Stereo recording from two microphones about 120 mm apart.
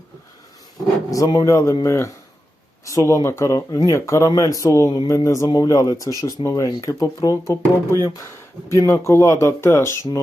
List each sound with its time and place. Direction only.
1.1 s speech: 30° left (ahead or behind)